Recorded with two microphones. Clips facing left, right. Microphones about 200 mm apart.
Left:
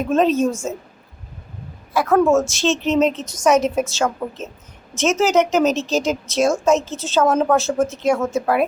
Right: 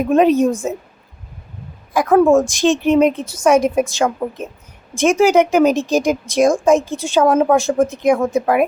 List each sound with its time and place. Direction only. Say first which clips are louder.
0.0 s a woman's voice: right 4 dB; 15° right (ahead or behind)
1.9 s a woman's voice: right 3 dB; 15° right (ahead or behind)